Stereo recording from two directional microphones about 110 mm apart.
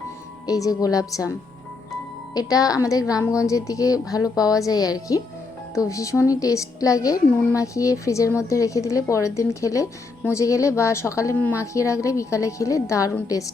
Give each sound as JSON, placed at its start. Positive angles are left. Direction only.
{"t": 0.4, "sound": "a woman's voice", "side_deg": 35}